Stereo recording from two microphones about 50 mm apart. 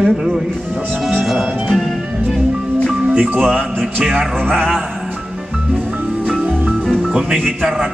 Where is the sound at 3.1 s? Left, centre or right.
Right.